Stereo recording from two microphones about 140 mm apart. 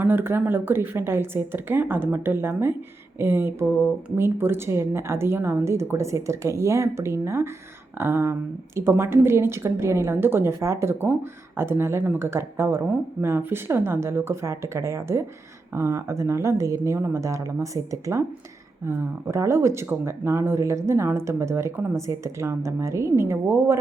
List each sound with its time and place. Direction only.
0.0 s a woman's voice: 15° right (ahead or behind)